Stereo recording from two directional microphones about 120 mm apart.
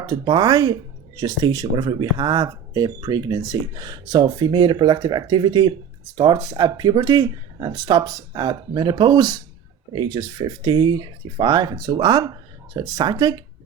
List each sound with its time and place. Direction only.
0.0 s speech: 35° right (ahead or behind)